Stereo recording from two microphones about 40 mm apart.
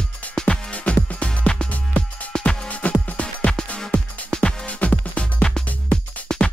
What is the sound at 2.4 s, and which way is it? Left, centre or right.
Music, centre.